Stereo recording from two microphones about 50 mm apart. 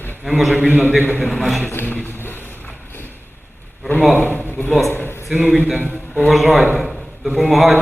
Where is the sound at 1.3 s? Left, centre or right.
Centre.